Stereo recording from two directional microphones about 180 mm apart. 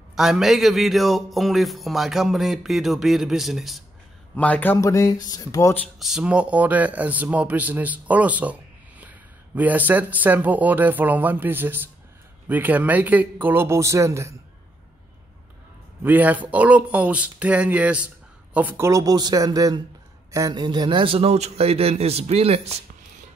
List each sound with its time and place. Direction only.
0.1 s speech: centre (ahead or behind); by 5.9 s 15° left (ahead or behind)
5.9 s speech: 5° right (ahead or behind)
16.0 s a man's voice: 10° right (ahead or behind); by 22.8 s 35° right (ahead or behind)